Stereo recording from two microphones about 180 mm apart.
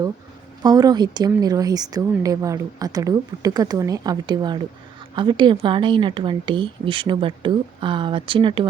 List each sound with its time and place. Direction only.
0.6 s a woman's voice: 20° right (ahead or behind)